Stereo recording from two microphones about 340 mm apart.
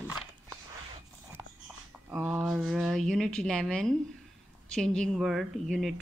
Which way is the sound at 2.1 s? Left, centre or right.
Centre.